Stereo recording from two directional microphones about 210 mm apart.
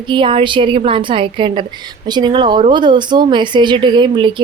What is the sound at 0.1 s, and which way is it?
A woman's voice, 25° right (ahead or behind).